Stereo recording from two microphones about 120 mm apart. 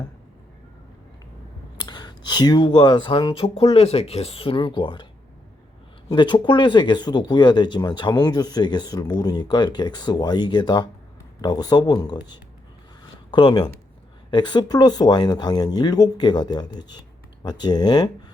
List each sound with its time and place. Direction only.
1.8 s speech: 35° left (ahead or behind)
6.1 s speech: 40° left (ahead or behind)